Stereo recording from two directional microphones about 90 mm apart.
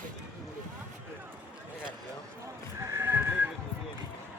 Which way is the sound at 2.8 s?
30° right (ahead or behind).